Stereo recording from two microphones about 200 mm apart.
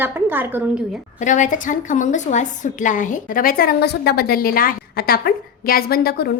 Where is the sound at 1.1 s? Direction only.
40° left (ahead or behind).